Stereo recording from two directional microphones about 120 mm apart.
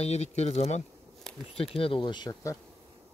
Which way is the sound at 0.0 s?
65° left (ahead or behind).